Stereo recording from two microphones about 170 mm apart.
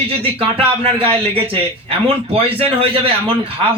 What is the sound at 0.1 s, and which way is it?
Speech, 35° right (ahead or behind).